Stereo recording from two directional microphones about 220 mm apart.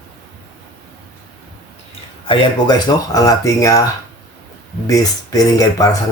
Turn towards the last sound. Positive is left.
turn(degrees=15)  # may be behind; listen again after turning